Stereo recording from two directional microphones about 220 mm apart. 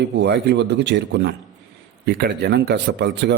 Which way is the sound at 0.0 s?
50° right (ahead or behind).